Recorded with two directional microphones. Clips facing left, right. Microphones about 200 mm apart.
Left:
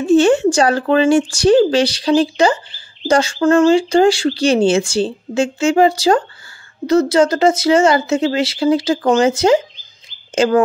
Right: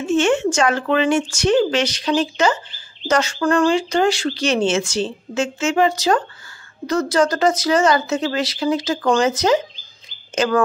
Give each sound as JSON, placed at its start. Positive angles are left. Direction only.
{"t": 0.0, "sound": "speech", "side_deg": 35}